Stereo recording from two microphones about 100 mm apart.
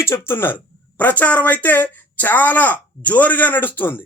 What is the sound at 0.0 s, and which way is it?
A man's voice, 25° left (ahead or behind).